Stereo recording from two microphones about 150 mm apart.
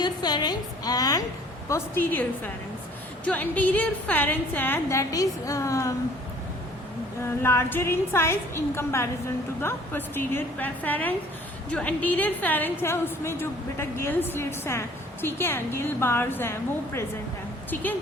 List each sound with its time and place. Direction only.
0.0 s a woman's voice: 30° left (ahead or behind)
1.7 s a woman's voice: 15° left (ahead or behind)
7.3 s a woman's voice: 15° left (ahead or behind)